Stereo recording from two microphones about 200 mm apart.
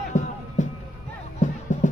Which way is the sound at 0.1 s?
40° left (ahead or behind).